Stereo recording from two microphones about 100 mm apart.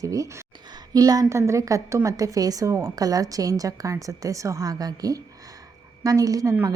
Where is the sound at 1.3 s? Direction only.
30° right (ahead or behind).